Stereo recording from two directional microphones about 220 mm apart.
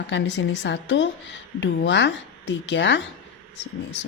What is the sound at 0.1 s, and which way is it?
A woman's voice, 55° left (ahead or behind).